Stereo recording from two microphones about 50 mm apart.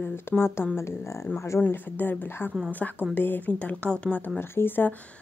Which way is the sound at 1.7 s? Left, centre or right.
Left.